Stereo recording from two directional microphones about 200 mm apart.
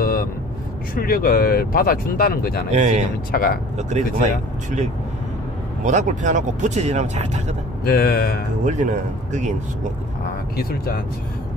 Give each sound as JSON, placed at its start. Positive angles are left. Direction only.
{"t": 0.0, "sound": "vehicle", "side_deg": 45}
{"t": 0.9, "sound": "speech", "side_deg": 45}
{"t": 2.7, "sound": "speech", "side_deg": -35}
{"t": 3.3, "sound": "speech", "side_deg": 50}
{"t": 3.7, "sound": "speech", "side_deg": -35}
{"t": 5.9, "sound": "speech", "side_deg": -35}
{"t": 7.8, "sound": "speech", "side_deg": 50}
{"t": 8.6, "sound": "speech", "side_deg": -35}
{"t": 10.5, "sound": "speech", "side_deg": 50}